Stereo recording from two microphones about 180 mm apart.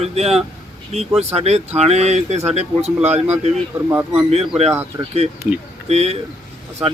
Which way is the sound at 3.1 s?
10° right (ahead or behind).